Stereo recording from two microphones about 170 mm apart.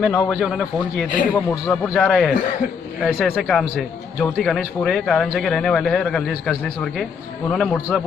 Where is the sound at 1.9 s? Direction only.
5° left (ahead or behind).